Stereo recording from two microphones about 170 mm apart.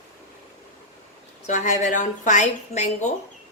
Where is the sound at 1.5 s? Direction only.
45° left (ahead or behind).